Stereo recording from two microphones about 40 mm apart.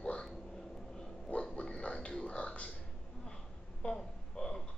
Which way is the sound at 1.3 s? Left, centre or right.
Left.